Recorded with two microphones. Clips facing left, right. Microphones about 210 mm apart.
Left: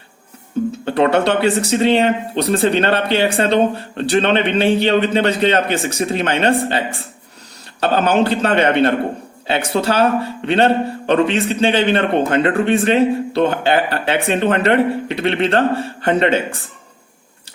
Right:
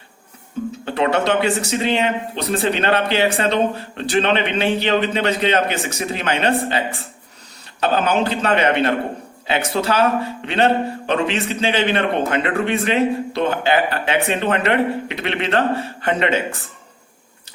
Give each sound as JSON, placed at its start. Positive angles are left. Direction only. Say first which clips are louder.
{"t": 0.9, "sound": "a man's voice", "louder": "left 3 dB", "side_deg": 35}